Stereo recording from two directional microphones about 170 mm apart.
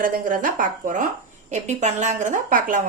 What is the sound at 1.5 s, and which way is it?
A woman's voice, 45° right (ahead or behind).